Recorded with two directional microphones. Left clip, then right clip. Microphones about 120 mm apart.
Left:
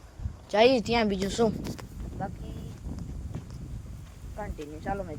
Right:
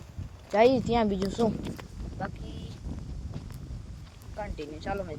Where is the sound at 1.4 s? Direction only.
45° left (ahead or behind).